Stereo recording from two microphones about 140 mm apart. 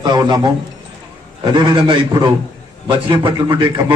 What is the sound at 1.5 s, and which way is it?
A man's voice, 35° right (ahead or behind).